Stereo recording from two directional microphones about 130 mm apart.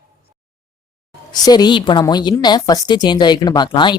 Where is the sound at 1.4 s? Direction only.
35° left (ahead or behind).